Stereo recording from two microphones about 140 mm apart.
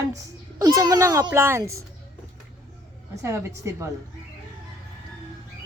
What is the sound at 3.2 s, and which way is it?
Speech, 20° right (ahead or behind).